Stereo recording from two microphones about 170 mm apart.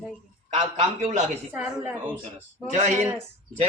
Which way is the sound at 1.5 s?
10° right (ahead or behind).